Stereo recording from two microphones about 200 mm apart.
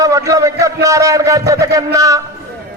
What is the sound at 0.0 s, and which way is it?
A man's voice, 15° right (ahead or behind).